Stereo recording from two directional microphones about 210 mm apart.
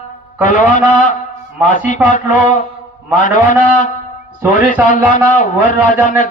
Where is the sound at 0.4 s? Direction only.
40° left (ahead or behind).